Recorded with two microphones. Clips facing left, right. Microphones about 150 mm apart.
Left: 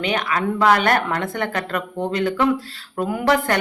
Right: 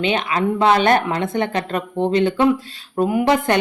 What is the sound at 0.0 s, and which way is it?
Speech, 25° right (ahead or behind).